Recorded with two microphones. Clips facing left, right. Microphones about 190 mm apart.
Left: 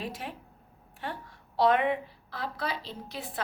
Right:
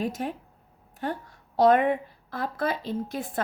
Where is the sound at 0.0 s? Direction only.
45° right (ahead or behind).